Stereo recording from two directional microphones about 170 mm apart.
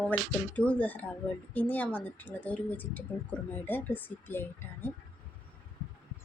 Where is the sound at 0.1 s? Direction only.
10° left (ahead or behind).